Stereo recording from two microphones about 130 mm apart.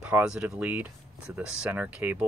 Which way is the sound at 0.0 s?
10° right (ahead or behind).